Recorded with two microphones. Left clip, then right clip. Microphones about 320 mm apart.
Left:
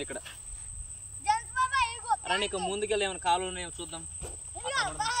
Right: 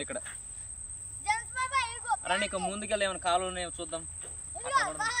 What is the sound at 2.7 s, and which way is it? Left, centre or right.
Speech, centre.